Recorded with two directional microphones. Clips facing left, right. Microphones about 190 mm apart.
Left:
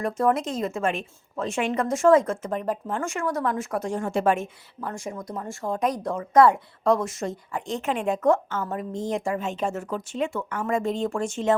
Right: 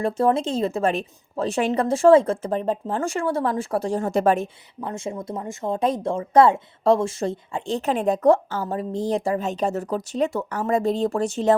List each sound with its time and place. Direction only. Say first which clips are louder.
0.0 s speech: right 3 dB; 30° right (ahead or behind)
4.8 s speech: right 3 dB; 25° right (ahead or behind)